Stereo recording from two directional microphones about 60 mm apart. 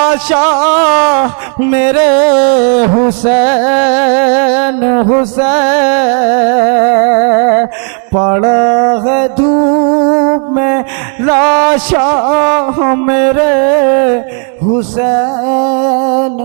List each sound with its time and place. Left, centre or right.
0.0 s speech: right
4.9 s mantra: right
5.4 s speech: right
8.1 s mantra: right
9.6 s music: right
11.2 s speech: right
14.7 s mantra: right
15.9 s music: right